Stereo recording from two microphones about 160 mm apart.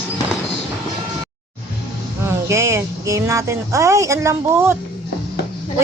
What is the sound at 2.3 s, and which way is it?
Speech, 20° right (ahead or behind).